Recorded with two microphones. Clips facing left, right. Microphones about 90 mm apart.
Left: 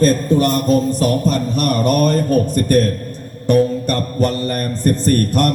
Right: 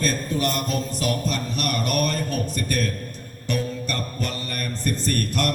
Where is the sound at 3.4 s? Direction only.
45° left (ahead or behind).